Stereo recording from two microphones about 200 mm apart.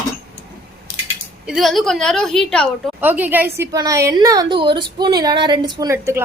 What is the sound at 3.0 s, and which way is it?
A woman's voice, 10° right (ahead or behind).